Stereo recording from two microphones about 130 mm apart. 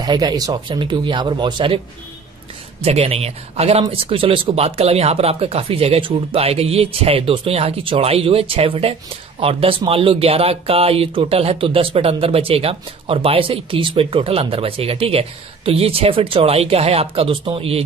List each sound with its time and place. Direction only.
0.0 s speech: 30° right (ahead or behind)
2.8 s speech: 50° right (ahead or behind)